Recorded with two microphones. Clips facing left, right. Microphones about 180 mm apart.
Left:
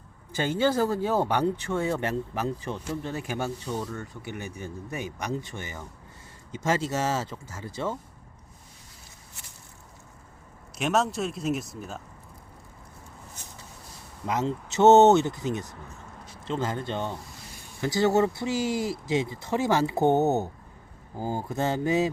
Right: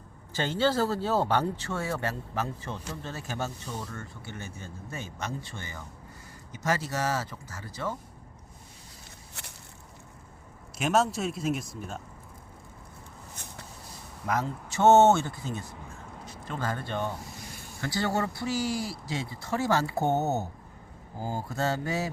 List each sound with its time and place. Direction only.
0.3 s speech: 15° left (ahead or behind)
10.8 s speech: centre (ahead or behind)
13.3 s a sound: 60° right (ahead or behind)
14.3 s speech: 20° left (ahead or behind)